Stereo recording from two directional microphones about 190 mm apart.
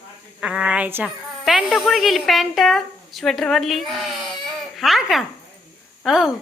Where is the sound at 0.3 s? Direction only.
5° right (ahead or behind).